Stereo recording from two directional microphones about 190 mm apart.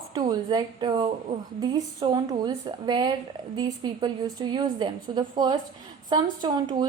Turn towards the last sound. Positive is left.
turn(degrees=-25)  # may be behind; listen again after turning